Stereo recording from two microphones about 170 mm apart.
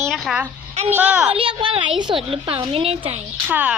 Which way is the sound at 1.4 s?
30° right (ahead or behind).